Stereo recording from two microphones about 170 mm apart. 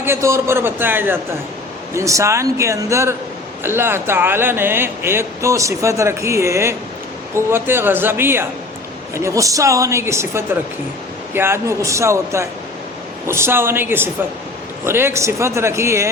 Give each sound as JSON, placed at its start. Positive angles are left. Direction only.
{"t": 0.0, "sound": "speech", "side_deg": -15}